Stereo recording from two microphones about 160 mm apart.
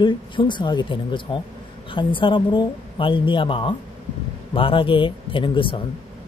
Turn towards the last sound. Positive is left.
turn(degrees=30)  # may be behind; listen again after turning